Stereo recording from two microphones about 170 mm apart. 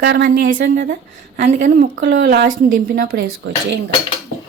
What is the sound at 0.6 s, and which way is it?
Speech, 90° right.